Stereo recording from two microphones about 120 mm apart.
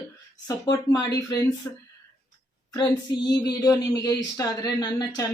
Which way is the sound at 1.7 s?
20° left (ahead or behind).